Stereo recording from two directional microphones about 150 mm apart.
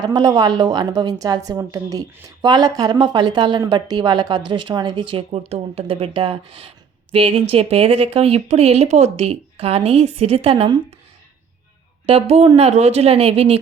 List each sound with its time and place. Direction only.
0.0 s a woman's voice: 25° right (ahead or behind)
12.0 s speech: 45° right (ahead or behind)